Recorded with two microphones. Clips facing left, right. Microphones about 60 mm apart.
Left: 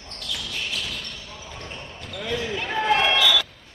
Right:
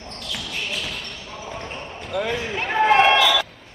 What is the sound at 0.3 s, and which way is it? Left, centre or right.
Basketball bounce, right.